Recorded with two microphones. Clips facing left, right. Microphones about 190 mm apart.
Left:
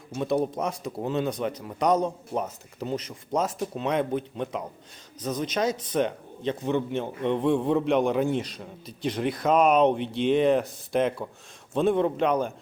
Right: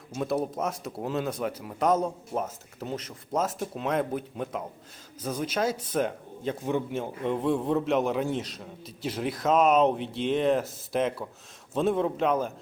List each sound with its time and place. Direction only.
0.2 s speech: 5° right (ahead or behind)